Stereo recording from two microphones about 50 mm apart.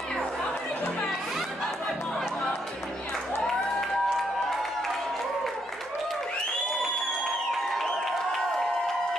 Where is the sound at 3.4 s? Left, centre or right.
Centre.